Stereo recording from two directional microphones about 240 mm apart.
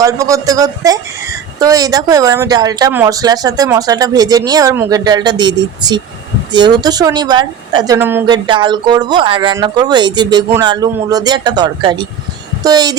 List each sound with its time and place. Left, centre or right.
0.0 s speech: centre